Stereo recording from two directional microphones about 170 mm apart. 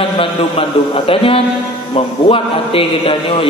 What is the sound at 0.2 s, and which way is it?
A man's voice, 35° left (ahead or behind).